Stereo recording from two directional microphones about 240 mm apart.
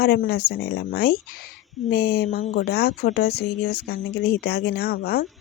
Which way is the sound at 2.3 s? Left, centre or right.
Left.